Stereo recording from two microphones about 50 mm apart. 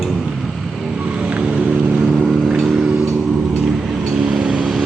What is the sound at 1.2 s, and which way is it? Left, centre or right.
Vehicle, right.